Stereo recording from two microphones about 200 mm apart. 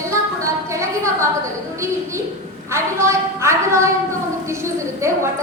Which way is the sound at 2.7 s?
15° right (ahead or behind).